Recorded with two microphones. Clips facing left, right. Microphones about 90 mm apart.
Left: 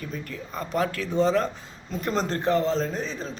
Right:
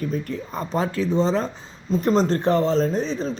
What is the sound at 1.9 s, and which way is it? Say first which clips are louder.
Speech: right 7 dB; 35° right (ahead or behind).